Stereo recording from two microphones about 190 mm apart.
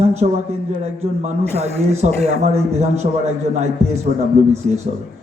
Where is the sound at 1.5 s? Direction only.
35° right (ahead or behind).